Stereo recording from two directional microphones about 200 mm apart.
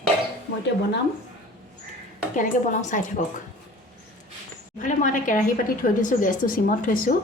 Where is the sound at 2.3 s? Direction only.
40° left (ahead or behind).